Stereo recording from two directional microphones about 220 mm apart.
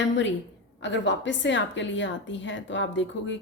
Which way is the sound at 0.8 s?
55° left (ahead or behind).